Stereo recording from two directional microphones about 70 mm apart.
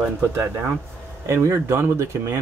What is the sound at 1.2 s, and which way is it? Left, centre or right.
Speech, right.